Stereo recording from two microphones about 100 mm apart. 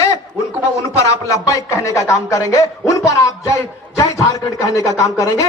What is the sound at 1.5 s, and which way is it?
A man's voice, 30° left (ahead or behind).